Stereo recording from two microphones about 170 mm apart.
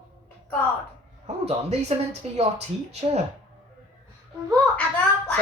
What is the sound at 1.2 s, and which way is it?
Speech, 40° right (ahead or behind).